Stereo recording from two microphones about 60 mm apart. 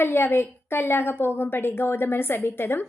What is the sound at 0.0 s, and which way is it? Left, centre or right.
A woman's voice, left.